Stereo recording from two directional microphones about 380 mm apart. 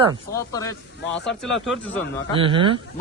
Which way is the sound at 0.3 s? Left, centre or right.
Centre.